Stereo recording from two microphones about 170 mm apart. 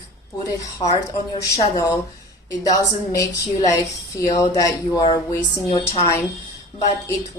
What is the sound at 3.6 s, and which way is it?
A woman's voice, 20° left (ahead or behind).